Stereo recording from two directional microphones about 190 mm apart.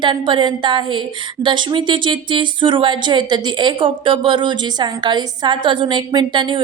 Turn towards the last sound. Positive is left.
turn(degrees=-25)  # may be behind; listen again after turning